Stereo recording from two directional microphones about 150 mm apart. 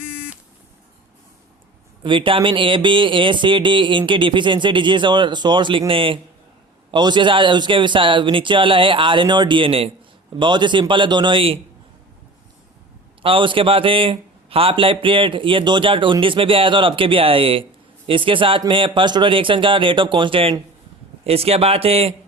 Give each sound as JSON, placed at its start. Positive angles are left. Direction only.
{"t": 0.1, "sound": "buzzer", "side_deg": -5}
{"t": 2.0, "sound": "speech", "side_deg": -35}
{"t": 13.2, "sound": "speech", "side_deg": -35}